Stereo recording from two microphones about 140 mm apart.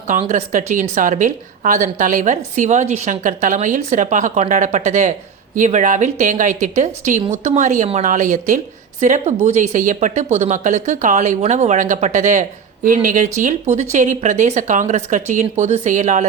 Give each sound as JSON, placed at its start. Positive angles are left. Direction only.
{"t": 0.3, "sound": "a woman's voice", "side_deg": -60}